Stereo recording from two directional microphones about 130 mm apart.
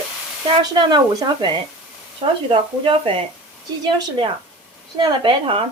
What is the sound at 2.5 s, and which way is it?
Speech, 45° right (ahead or behind).